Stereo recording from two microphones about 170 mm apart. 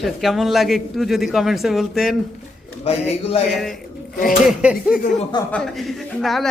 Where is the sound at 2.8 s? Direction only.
40° left (ahead or behind).